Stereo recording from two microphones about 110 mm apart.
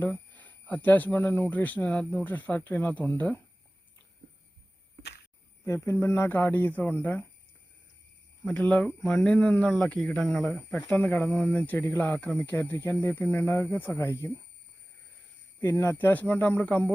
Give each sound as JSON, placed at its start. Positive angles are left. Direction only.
{"t": 0.0, "sound": "speech", "side_deg": 15}
{"t": 5.6, "sound": "speech", "side_deg": 25}
{"t": 8.4, "sound": "speech", "side_deg": 10}
{"t": 15.6, "sound": "speech", "side_deg": 25}